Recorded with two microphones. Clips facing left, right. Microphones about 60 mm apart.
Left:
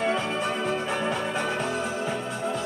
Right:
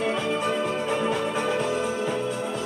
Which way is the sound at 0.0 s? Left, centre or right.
Left.